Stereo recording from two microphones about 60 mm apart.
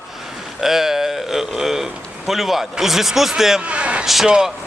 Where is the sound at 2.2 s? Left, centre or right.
Centre.